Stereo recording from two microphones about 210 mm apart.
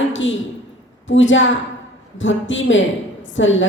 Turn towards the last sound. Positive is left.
turn(degrees=65)  # may be behind; listen again after turning